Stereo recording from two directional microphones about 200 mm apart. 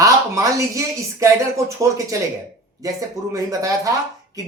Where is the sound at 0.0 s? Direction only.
15° right (ahead or behind).